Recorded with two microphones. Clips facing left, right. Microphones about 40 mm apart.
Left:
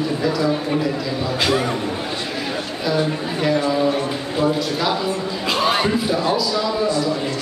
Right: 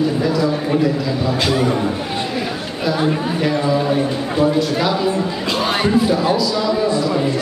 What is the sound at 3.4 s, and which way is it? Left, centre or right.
Speech, centre.